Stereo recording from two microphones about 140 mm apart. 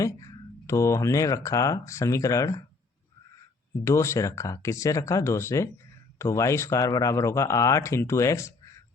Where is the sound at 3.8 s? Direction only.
20° left (ahead or behind).